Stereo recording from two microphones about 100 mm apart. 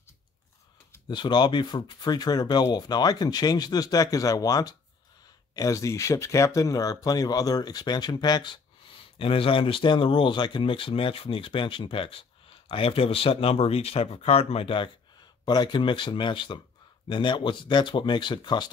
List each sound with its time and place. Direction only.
1.0 s speech: 45° left (ahead or behind); by 14.9 s 65° left (ahead or behind)
15.4 s speech: 45° left (ahead or behind)